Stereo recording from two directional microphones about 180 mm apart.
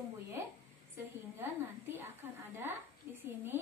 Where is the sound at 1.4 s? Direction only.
10° right (ahead or behind).